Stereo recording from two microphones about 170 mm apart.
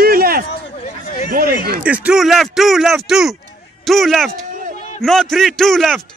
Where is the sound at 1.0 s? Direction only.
55° left (ahead or behind).